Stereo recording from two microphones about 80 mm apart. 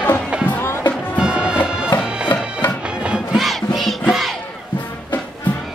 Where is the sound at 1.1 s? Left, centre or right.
Centre.